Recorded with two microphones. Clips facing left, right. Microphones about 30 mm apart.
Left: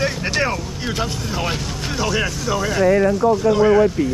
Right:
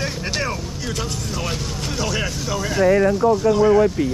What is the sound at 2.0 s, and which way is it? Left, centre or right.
Speech, centre.